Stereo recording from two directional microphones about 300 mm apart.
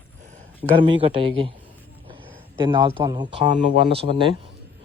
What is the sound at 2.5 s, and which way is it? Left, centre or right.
Speech, centre.